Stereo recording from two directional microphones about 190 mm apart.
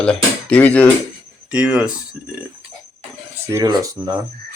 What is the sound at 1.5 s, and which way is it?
Speech, 5° right (ahead or behind).